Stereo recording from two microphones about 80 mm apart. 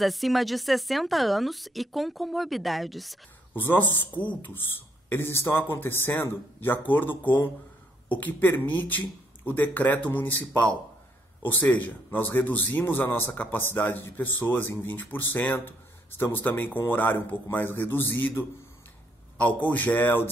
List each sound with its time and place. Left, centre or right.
0.0 s speech: centre
3.5 s speech: left
5.1 s speech: left